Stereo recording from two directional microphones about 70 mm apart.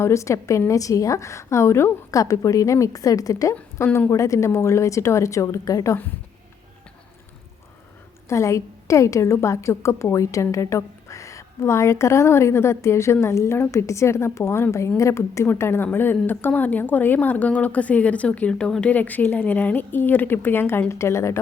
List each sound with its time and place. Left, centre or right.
0.0 s a woman's voice: left
2.1 s a woman's voice: left
4.1 s a woman's voice: left
8.3 s a woman's voice: left